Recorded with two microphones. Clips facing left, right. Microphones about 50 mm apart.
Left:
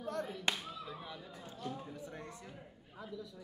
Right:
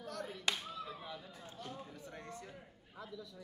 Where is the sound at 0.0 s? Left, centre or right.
Left.